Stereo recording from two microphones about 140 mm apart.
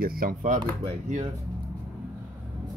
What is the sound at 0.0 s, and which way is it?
Speech, 90° right.